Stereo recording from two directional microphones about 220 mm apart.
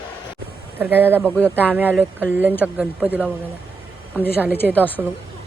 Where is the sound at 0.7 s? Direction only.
10° right (ahead or behind).